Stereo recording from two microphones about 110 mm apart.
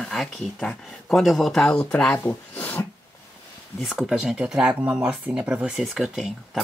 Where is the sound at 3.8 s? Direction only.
5° right (ahead or behind).